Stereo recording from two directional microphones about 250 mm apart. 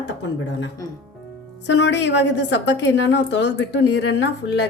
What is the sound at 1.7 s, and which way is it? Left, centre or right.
A woman's voice, left.